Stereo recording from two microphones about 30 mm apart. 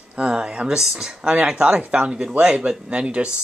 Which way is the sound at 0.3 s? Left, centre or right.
Right.